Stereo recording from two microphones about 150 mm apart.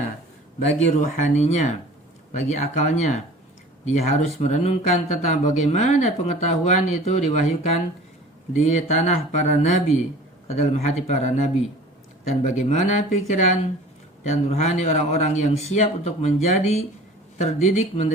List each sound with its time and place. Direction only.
1.0 s speech: 50° left (ahead or behind)
8.5 s speech: 50° left (ahead or behind)